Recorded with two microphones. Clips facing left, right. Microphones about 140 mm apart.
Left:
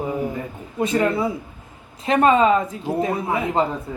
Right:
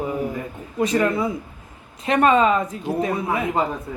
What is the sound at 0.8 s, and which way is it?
Speech, 25° left (ahead or behind).